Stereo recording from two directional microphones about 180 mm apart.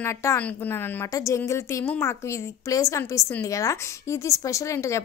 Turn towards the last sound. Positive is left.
turn(degrees=15)  # may be behind; listen again after turning